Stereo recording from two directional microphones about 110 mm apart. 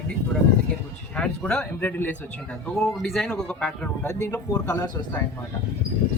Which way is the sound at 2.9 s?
Centre (ahead or behind).